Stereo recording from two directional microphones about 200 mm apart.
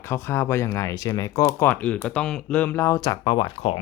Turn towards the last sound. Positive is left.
turn(degrees=25)  # may be behind; listen again after turning